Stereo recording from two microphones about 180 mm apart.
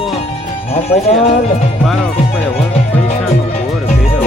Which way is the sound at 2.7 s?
35° left (ahead or behind).